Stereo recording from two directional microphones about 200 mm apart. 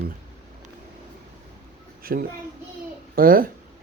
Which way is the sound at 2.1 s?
50° right (ahead or behind).